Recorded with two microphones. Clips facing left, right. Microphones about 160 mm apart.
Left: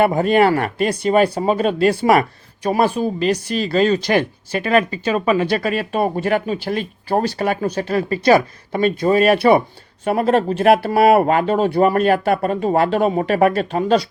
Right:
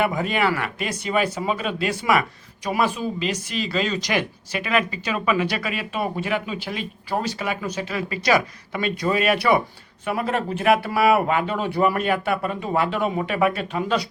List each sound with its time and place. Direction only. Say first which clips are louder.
0.0 s speech: left 8 dB; 45° left (ahead or behind)
7.3 s speech: left 7 dB; 40° left (ahead or behind)